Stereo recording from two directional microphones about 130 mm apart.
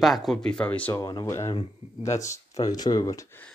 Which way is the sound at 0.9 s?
30° left (ahead or behind).